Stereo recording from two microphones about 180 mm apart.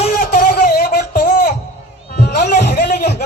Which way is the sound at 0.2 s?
55° left (ahead or behind).